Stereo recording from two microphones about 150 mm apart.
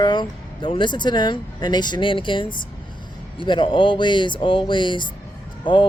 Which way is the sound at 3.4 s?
35° left (ahead or behind).